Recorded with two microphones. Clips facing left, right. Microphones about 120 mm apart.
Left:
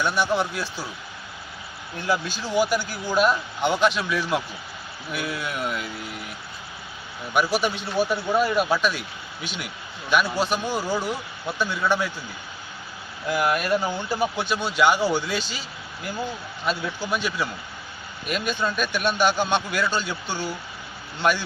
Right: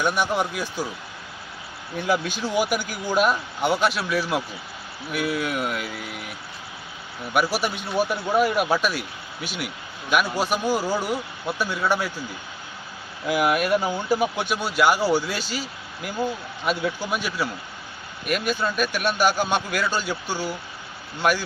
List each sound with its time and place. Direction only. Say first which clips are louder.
0.0 s speech: even; 15° right (ahead or behind)
2.0 s speech: right 2 dB; 15° right (ahead or behind)
7.3 s speech: left 1 dB; 10° right (ahead or behind)
13.2 s speech: right 2 dB; 10° right (ahead or behind)
16.6 s speech: right 2 dB; 10° right (ahead or behind)